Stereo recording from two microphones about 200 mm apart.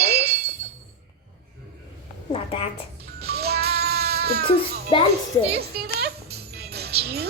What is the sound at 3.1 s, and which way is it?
Music, 50° right (ahead or behind).